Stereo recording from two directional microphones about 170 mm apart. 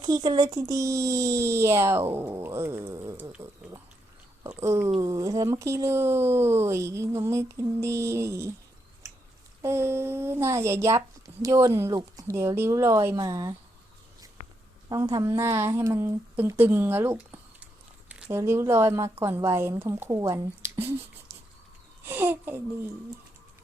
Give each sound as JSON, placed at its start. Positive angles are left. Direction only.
{"t": 0.0, "sound": "speech", "side_deg": -25}
{"t": 9.6, "sound": "speech", "side_deg": -15}
{"t": 14.8, "sound": "a woman's voice", "side_deg": -20}
{"t": 22.0, "sound": "speech", "side_deg": -15}